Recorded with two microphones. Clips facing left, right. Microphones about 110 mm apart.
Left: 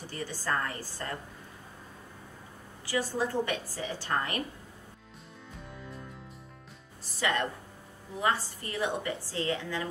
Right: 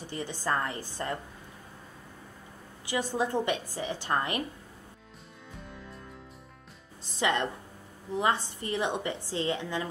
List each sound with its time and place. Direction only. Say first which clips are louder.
0.0 s a woman's voice: right 2 dB; 20° right (ahead or behind)
2.9 s a woman's voice: right 1 dB; 20° right (ahead or behind)
7.0 s a woman's voice: right 2 dB; 20° right (ahead or behind)